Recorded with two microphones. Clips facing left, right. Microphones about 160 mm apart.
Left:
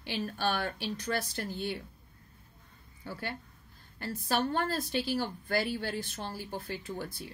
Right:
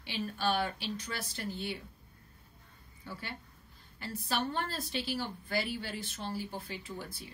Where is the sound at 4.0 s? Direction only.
45° left (ahead or behind).